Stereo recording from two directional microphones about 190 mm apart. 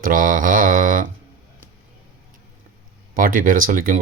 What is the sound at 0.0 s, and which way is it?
Mantra, 45° right (ahead or behind).